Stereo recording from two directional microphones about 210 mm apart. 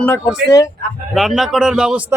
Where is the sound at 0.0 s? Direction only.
5° left (ahead or behind).